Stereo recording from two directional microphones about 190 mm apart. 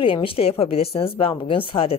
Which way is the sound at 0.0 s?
30° left (ahead or behind).